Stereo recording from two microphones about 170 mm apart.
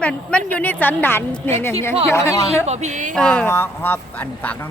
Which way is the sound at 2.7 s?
45° right (ahead or behind).